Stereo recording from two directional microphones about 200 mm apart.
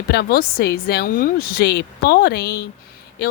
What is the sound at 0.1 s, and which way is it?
Speech, 50° left (ahead or behind).